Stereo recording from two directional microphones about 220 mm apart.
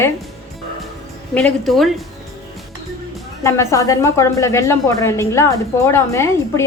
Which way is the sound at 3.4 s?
15° left (ahead or behind).